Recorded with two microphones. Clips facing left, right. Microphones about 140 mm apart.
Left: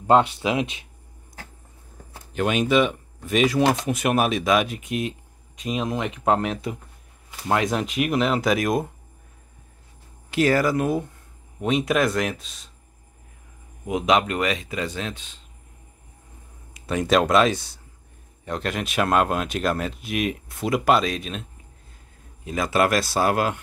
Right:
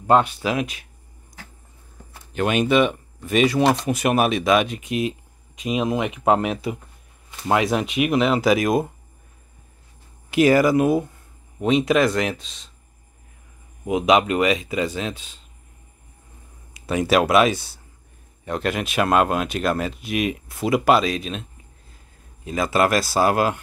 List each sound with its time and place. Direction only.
0.0 s speech: 25° left (ahead or behind)
2.3 s speech: centre (ahead or behind)
10.3 s speech: 15° right (ahead or behind)
11.6 s speech: centre (ahead or behind)
13.8 s speech: 10° right (ahead or behind)
16.7 s speech: 5° right (ahead or behind)